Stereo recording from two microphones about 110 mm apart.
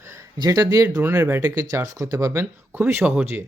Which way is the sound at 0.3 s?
35° right (ahead or behind).